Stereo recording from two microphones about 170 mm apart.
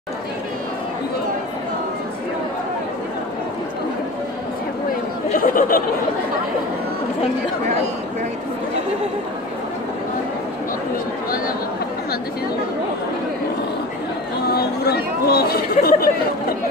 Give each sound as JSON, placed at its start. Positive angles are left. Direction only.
{"t": 5.4, "sound": "speech", "side_deg": 55}
{"t": 11.2, "sound": "speech", "side_deg": 55}
{"t": 14.5, "sound": "speech", "side_deg": 65}